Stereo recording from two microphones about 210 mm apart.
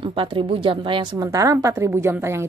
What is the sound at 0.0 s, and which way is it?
A woman's voice, 25° right (ahead or behind).